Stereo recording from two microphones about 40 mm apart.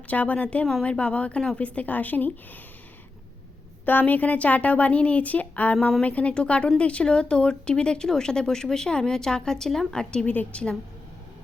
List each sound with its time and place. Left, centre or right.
0.1 s a woman's voice: left
3.8 s a woman's voice: left